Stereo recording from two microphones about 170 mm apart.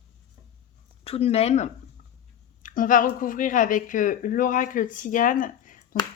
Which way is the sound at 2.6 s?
50° left (ahead or behind).